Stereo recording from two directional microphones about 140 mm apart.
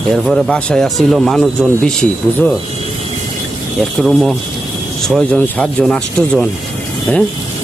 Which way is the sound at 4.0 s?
Centre (ahead or behind).